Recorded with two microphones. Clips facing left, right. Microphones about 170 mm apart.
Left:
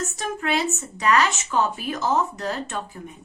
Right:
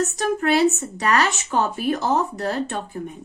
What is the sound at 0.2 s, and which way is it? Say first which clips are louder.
A woman's voice: right 7 dB; 35° right (ahead or behind).